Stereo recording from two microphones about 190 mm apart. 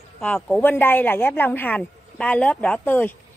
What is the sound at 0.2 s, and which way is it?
A woman's voice, 5° left (ahead or behind).